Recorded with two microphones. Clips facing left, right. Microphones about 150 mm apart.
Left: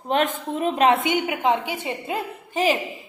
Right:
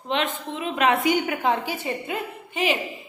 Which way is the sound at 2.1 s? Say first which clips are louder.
Left 3 dB; 40° left (ahead or behind).